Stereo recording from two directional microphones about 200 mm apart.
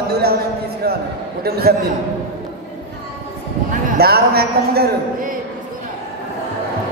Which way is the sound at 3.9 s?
50° right (ahead or behind).